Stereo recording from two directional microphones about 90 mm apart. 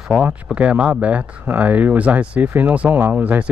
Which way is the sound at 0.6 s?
15° right (ahead or behind).